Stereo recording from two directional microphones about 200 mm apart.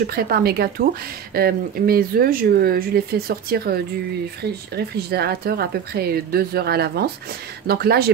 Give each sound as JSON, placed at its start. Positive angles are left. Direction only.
{"t": 0.0, "sound": "speech", "side_deg": -50}